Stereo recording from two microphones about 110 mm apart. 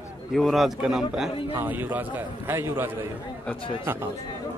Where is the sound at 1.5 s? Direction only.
15° right (ahead or behind).